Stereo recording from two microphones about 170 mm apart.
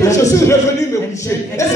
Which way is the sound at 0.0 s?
20° left (ahead or behind).